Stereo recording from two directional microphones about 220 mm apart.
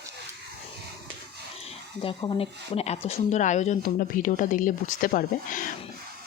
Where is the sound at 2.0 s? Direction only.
25° left (ahead or behind).